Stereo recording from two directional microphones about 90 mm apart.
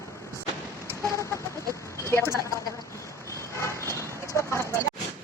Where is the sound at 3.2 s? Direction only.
35° left (ahead or behind).